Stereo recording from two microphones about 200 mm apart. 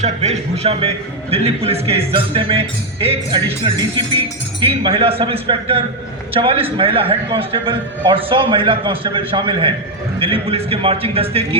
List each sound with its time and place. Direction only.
0.0 s a man's voice: 35° right (ahead or behind)